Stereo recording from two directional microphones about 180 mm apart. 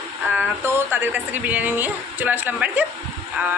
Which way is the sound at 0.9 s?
10° right (ahead or behind).